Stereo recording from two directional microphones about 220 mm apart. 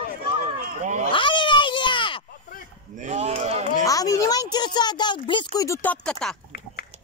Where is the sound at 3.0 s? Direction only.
30° right (ahead or behind).